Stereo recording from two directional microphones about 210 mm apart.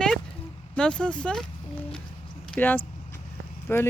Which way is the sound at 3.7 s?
10° left (ahead or behind).